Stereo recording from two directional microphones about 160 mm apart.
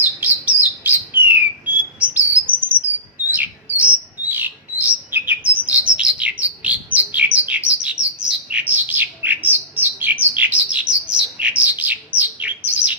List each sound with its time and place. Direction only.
0.0 s bird: 10° right (ahead or behind)
2.6 s bird: 65° right (ahead or behind)
3.2 s bird: 10° right (ahead or behind)